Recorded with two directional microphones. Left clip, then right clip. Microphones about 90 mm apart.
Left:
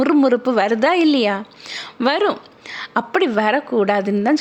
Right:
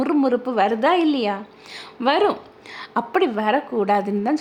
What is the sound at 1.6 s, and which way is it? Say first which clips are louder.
Speech: left 7 dB; 20° left (ahead or behind).